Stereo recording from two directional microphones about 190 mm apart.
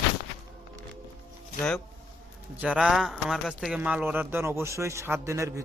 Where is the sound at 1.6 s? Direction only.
5° left (ahead or behind).